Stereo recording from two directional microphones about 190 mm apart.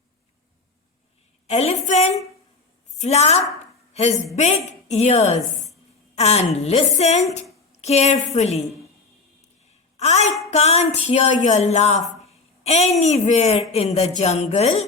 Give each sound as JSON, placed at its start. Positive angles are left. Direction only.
{"t": 1.5, "sound": "a woman's voice", "side_deg": 35}
{"t": 10.0, "sound": "a woman's voice", "side_deg": 35}